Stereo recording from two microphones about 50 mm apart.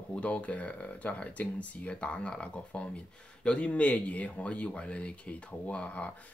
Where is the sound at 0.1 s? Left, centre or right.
Left.